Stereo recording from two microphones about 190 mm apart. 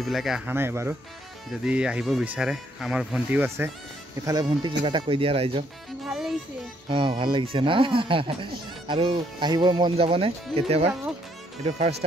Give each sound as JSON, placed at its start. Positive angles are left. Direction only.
{"t": 0.0, "sound": "speech", "side_deg": 0}
{"t": 4.3, "sound": "speech", "side_deg": -20}
{"t": 6.0, "sound": "music", "side_deg": 0}
{"t": 6.9, "sound": "speech", "side_deg": -25}